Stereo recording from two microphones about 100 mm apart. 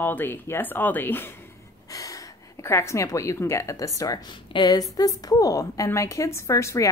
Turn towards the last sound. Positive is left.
turn(degrees=30)  # may be behind; listen again after turning